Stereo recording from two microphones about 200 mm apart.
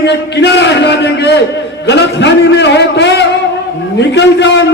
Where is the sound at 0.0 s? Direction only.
60° left (ahead or behind).